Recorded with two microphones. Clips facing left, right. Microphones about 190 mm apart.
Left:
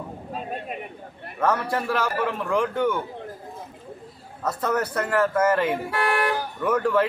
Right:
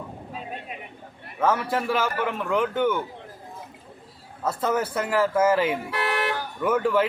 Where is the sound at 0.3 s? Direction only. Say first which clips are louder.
Left 5 dB; 45° left (ahead or behind).